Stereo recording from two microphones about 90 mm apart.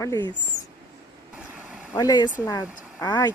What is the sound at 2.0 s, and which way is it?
Speech, 50° left (ahead or behind).